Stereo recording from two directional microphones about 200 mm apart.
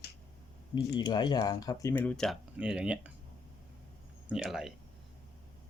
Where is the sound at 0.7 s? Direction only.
20° left (ahead or behind); by 3.1 s 5° right (ahead or behind).